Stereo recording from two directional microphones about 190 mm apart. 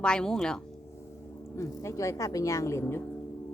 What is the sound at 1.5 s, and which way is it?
A woman's voice, 15° left (ahead or behind).